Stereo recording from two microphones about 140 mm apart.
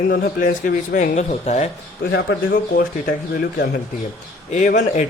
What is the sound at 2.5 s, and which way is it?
Speech, 90° left.